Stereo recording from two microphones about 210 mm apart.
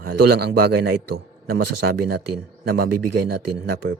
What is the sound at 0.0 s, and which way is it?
Speech, 50° right (ahead or behind).